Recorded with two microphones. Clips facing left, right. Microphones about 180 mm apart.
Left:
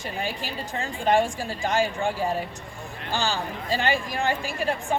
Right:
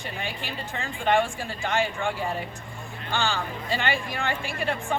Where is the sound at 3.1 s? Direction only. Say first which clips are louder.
Left 1 dB; 40° left (ahead or behind).